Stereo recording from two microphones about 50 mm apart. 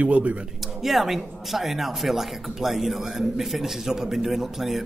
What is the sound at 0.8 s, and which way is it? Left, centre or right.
A man's voice, centre.